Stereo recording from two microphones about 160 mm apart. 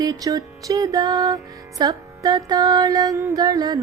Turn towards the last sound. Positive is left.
turn(degrees=-25)  # may be behind; listen again after turning